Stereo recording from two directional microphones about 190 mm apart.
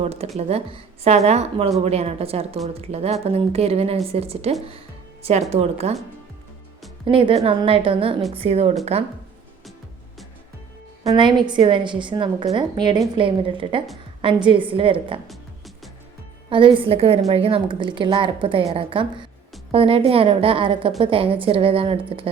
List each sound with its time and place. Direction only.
0.0 s a woman's voice: 30° right (ahead or behind)
7.0 s a woman's voice: 25° right (ahead or behind)
11.1 s a woman's voice: 25° right (ahead or behind)
15.3 s music: centre (ahead or behind)
16.5 s a woman's voice: 25° right (ahead or behind)